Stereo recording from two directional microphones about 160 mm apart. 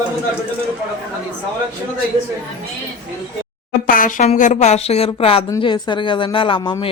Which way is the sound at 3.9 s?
55° left (ahead or behind).